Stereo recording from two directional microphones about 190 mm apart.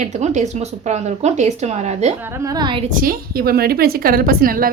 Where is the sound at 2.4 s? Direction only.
20° right (ahead or behind).